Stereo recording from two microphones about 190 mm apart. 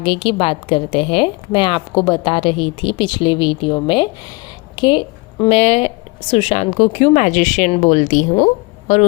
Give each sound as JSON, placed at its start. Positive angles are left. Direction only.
{"t": 0.0, "sound": "a woman's voice", "side_deg": 30}